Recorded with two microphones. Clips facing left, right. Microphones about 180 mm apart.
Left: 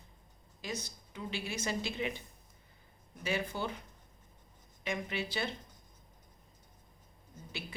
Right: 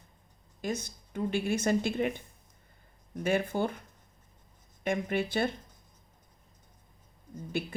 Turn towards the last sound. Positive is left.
turn(degrees=-50)  # may be behind; listen again after turning